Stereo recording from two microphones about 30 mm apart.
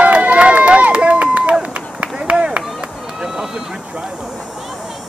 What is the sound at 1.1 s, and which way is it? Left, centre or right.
Run, right.